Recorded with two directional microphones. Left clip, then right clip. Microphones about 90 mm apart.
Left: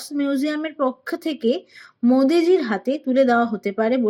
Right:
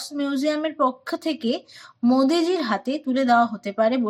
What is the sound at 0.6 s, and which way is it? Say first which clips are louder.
A woman's voice: right 1 dB; 20° left (ahead or behind).